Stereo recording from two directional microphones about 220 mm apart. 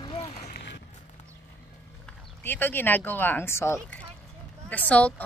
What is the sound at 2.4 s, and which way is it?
Speech, 10° left (ahead or behind).